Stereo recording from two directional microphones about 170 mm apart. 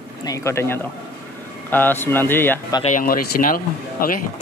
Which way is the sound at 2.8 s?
50° left (ahead or behind).